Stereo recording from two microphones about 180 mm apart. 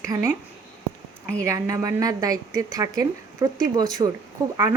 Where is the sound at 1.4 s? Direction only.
15° right (ahead or behind).